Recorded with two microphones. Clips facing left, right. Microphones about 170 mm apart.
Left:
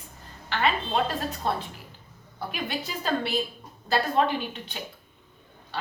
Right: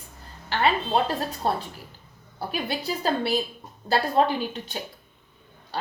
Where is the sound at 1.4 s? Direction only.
35° right (ahead or behind).